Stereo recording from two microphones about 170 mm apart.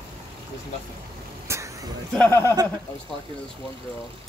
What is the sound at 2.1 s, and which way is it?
Speech, 15° left (ahead or behind).